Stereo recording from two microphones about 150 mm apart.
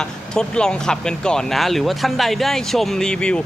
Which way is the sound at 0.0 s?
5° left (ahead or behind).